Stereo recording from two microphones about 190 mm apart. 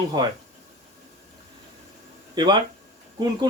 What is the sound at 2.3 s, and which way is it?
Speech, 20° right (ahead or behind).